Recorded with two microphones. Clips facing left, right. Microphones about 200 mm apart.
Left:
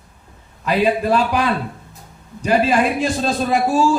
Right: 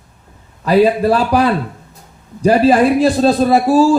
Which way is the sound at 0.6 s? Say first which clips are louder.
Right 6 dB; 40° right (ahead or behind).